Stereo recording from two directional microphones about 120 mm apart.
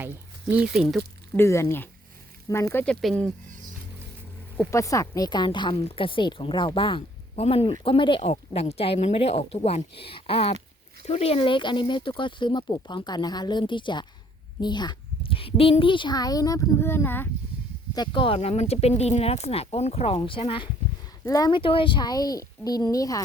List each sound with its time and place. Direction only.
0.0 s speech: 15° right (ahead or behind)
1.4 s speech: 25° left (ahead or behind)
2.7 s speech: 10° left (ahead or behind)
4.7 s a woman's voice: 25° left (ahead or behind); by 8.3 s 45° left (ahead or behind)
8.3 s a woman's voice: 55° left (ahead or behind); by 17.2 s 20° left (ahead or behind)
17.9 s a woman's voice: 40° left (ahead or behind)
18.3 s speech: 60° left (ahead or behind); by 20.7 s 45° left (ahead or behind)
21.2 s a woman's voice: 30° left (ahead or behind)
21.6 s a woman's voice: 45° left (ahead or behind); by 23.2 s 30° left (ahead or behind)